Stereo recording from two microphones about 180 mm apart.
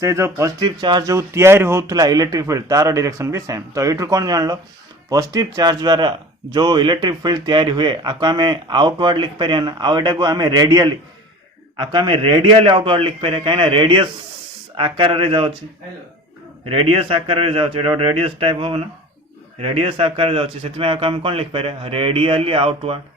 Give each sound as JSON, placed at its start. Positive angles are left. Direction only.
{"t": 0.0, "sound": "speech", "side_deg": -15}
{"t": 16.6, "sound": "speech", "side_deg": -30}